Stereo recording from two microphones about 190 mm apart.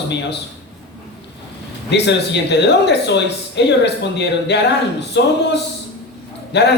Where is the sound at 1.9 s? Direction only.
65° left (ahead or behind).